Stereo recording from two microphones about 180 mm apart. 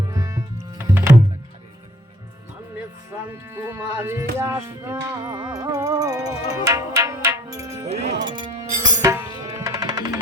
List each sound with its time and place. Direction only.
0.1 s music: 20° right (ahead or behind)
3.1 s speech: 15° right (ahead or behind)
8.3 s music: 25° right (ahead or behind)